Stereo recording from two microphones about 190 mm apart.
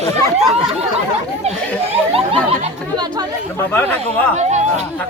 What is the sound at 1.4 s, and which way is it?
Speech, 35° right (ahead or behind).